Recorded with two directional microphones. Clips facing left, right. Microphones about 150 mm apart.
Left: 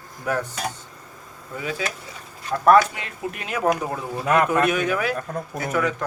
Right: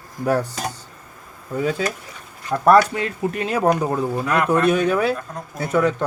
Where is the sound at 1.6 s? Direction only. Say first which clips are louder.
Right 6 dB; 35° right (ahead or behind).